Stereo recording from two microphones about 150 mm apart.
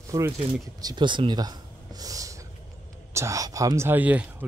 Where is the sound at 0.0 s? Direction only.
20° right (ahead or behind).